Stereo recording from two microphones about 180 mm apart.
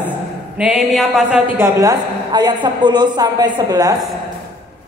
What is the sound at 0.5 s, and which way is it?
A woman's voice, 5° right (ahead or behind).